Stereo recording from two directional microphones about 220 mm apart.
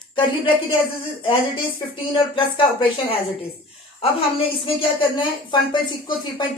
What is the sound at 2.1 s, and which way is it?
Speech, 25° left (ahead or behind).